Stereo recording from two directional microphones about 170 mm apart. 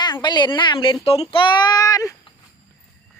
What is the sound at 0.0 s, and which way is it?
Speech, 25° left (ahead or behind).